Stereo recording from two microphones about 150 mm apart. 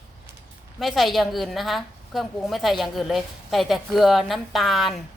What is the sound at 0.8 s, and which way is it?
A woman's voice, centre (ahead or behind).